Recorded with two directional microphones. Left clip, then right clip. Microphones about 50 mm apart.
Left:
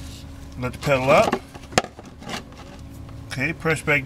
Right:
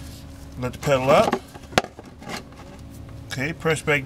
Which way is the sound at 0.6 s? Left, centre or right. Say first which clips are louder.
Even; centre.